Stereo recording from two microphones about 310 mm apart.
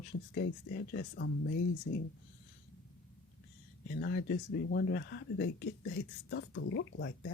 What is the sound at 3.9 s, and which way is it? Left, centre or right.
Speech, left.